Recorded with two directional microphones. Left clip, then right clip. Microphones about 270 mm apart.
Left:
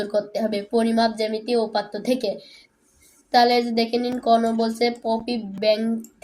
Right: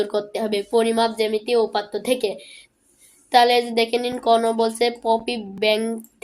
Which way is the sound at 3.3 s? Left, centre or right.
Right.